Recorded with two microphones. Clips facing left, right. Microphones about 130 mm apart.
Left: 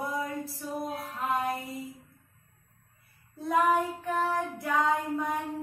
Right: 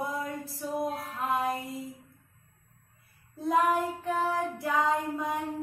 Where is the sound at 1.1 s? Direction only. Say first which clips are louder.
Left 1 dB; centre (ahead or behind).